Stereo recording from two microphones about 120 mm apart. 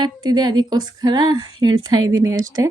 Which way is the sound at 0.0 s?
35° right (ahead or behind).